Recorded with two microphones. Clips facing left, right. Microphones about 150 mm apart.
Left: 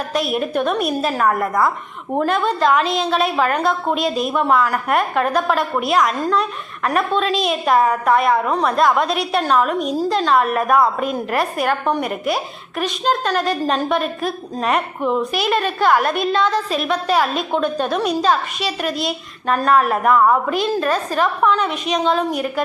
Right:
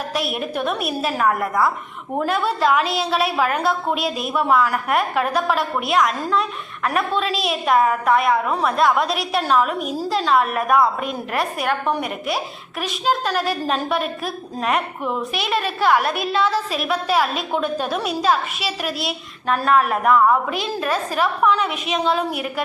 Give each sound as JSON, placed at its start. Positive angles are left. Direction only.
{"t": 0.1, "sound": "a woman's voice", "side_deg": 0}